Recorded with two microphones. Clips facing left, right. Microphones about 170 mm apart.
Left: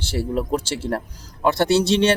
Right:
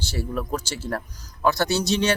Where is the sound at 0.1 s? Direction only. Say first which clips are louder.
Left 6 dB; 30° left (ahead or behind).